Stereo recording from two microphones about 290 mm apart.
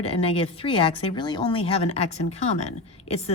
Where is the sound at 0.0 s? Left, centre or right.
Centre.